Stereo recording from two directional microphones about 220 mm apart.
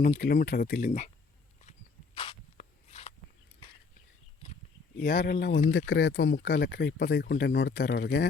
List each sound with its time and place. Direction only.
0.0 s speech: 40° left (ahead or behind)
2.1 s a sound: 25° left (ahead or behind)
5.0 s speech: 45° left (ahead or behind)